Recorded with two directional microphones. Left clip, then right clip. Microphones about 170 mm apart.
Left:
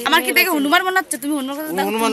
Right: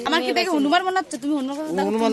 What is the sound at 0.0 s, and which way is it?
Speech, centre (ahead or behind).